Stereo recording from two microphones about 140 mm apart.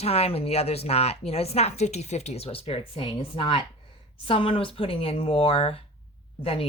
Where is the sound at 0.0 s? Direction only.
45° left (ahead or behind).